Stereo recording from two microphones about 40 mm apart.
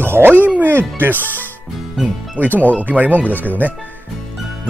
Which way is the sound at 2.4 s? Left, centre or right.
Right.